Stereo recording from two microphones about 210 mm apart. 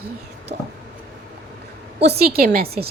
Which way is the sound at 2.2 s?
45° right (ahead or behind).